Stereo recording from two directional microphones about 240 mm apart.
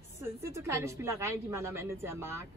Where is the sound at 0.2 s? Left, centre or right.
Centre.